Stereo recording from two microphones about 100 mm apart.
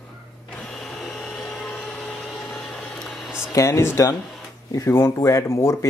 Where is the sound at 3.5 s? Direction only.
30° left (ahead or behind).